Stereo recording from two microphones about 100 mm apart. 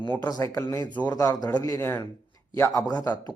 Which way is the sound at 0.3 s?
40° left (ahead or behind).